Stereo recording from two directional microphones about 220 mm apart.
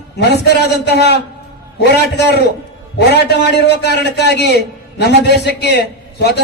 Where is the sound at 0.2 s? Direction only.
50° left (ahead or behind).